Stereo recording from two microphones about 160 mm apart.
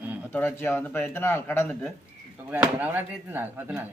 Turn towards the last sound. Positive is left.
turn(degrees=-10)  # may be behind; listen again after turning